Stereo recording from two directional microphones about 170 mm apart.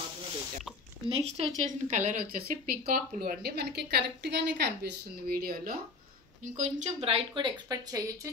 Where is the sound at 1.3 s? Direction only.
40° right (ahead or behind); by 5.8 s 60° right (ahead or behind).